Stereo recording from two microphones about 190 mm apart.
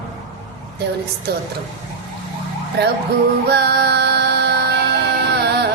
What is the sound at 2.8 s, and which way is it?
Speech, 60° right (ahead or behind).